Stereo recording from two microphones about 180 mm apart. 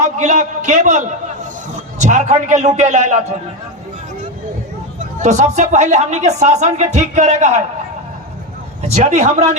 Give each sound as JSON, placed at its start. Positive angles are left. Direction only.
{"t": 0.0, "sound": "a man's voice", "side_deg": -40}
{"t": 5.2, "sound": "speech", "side_deg": -40}
{"t": 8.8, "sound": "speech", "side_deg": -40}